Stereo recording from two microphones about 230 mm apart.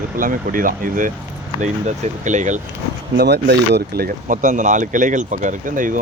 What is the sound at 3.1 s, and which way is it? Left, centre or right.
Speech, right.